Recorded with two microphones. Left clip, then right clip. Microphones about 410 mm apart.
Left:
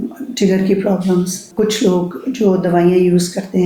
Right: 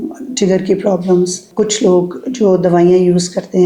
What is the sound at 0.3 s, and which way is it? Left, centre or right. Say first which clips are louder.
Speech: right 2 dB; right.